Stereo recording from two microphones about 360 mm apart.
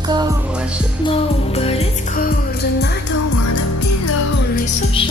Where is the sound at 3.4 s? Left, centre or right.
Left.